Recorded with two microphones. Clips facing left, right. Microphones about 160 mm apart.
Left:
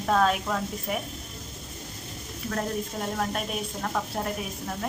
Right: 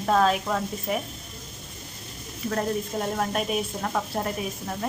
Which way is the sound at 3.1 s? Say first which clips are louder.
Right 3 dB; 5° right (ahead or behind).